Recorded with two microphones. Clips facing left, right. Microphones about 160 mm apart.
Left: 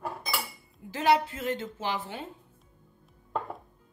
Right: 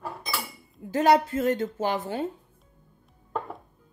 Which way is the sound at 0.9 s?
45° right (ahead or behind).